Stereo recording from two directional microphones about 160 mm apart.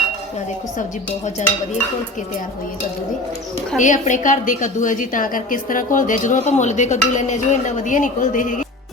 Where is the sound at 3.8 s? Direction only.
50° left (ahead or behind).